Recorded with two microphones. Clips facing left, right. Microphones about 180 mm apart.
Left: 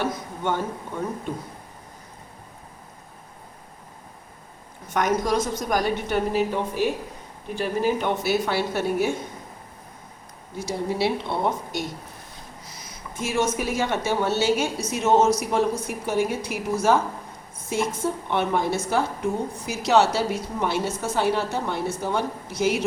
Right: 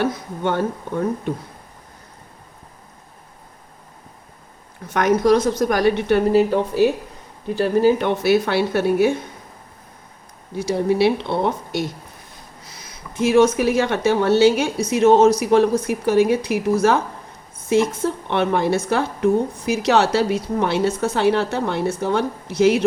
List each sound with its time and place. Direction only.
0.0 s a woman's voice: 70° right (ahead or behind)
4.9 s a woman's voice: 65° right (ahead or behind)
7.6 s a woman's voice: 75° right (ahead or behind)
10.6 s a woman's voice: 65° right (ahead or behind)
13.2 s a woman's voice: 65° right (ahead or behind)
15.9 s a woman's voice: 75° right (ahead or behind)
18.3 s a woman's voice: 75° right (ahead or behind)